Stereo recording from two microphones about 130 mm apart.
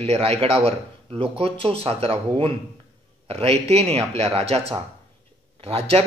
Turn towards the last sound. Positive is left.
turn(degrees=-50)  # may be behind; listen again after turning